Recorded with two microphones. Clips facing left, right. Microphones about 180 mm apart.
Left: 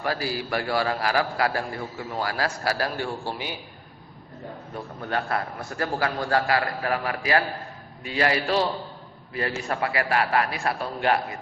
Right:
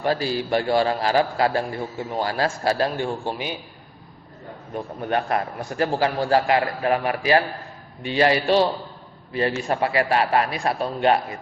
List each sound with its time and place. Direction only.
0.0 s a man's voice: 25° right (ahead or behind)
4.7 s a man's voice: 20° right (ahead or behind)